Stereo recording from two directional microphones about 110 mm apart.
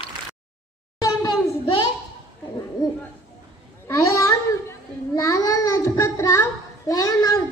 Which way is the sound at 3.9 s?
30° left (ahead or behind).